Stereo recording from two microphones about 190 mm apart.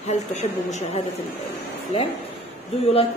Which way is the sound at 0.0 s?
35° left (ahead or behind).